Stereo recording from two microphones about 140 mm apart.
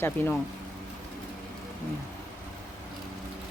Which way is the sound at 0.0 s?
15° left (ahead or behind).